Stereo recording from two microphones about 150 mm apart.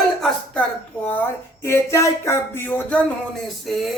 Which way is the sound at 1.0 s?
10° left (ahead or behind).